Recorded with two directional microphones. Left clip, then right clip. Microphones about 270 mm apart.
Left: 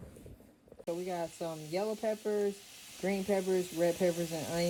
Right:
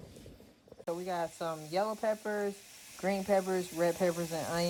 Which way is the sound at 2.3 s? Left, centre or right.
Centre.